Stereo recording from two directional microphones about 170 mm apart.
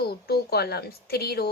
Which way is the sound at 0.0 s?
70° left (ahead or behind).